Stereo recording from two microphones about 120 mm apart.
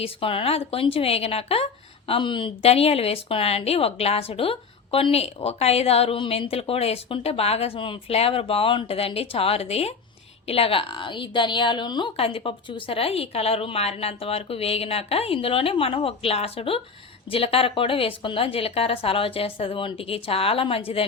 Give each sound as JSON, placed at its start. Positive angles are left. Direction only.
{"t": 0.0, "sound": "a woman's voice", "side_deg": 50}
{"t": 2.0, "sound": "a woman's voice", "side_deg": 45}